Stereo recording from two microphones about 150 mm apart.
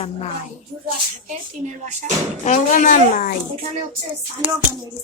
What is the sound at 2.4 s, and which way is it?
Speech, 55° left (ahead or behind).